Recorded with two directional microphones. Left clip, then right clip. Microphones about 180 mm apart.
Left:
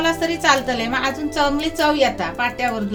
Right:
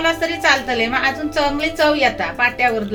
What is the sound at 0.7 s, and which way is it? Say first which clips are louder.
A woman's voice: right 3 dB; 60° left (ahead or behind).